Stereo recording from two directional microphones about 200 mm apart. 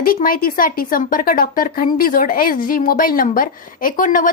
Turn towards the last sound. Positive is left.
turn(degrees=40)  # may be behind; listen again after turning